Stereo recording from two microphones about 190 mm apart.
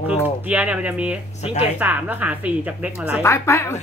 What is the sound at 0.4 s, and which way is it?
Speech, 10° right (ahead or behind).